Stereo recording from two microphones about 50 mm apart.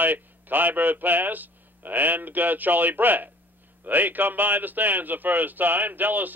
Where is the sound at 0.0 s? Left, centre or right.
Right.